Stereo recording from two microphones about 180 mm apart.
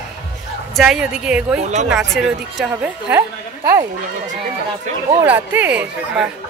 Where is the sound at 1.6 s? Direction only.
40° right (ahead or behind).